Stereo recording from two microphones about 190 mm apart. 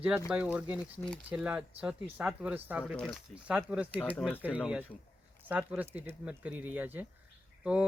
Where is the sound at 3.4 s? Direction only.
5° right (ahead or behind).